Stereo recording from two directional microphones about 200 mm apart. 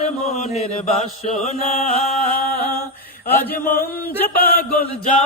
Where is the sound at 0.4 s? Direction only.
35° left (ahead or behind).